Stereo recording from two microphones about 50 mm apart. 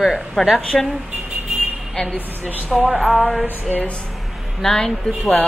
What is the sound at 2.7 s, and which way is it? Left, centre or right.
Speech, centre.